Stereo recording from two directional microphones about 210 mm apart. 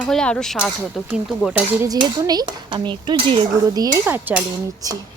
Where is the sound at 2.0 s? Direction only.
20° right (ahead or behind).